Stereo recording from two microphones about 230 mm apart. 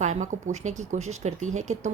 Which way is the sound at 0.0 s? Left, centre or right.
Right.